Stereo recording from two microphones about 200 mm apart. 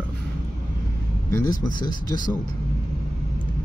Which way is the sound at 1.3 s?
20° left (ahead or behind).